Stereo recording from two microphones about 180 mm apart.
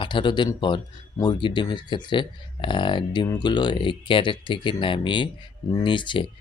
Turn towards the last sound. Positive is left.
turn(degrees=25)  # may be behind; listen again after turning